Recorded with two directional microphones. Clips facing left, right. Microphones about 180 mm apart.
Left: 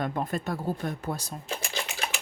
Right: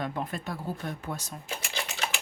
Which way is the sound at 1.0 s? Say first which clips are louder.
Left 3 dB; 35° left (ahead or behind).